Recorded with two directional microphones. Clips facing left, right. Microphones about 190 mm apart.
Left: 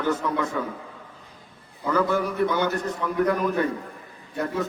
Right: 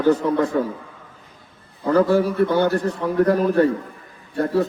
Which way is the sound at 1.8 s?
35° right (ahead or behind).